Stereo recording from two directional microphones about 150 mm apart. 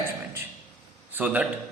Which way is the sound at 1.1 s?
10° right (ahead or behind).